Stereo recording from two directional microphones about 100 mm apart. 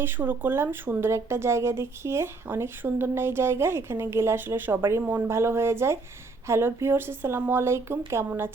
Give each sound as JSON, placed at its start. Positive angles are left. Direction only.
{"t": 0.0, "sound": "speech", "side_deg": -20}